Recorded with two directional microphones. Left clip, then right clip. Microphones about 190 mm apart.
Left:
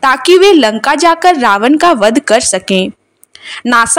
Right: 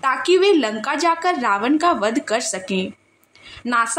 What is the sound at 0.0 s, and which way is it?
A woman's voice, 45° left (ahead or behind).